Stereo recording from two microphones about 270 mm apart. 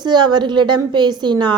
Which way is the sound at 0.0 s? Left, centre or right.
Centre.